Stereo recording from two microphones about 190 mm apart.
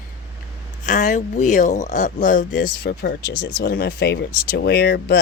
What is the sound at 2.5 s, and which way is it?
Speech, 60° left (ahead or behind).